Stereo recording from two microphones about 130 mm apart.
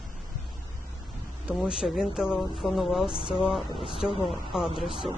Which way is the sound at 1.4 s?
5° right (ahead or behind).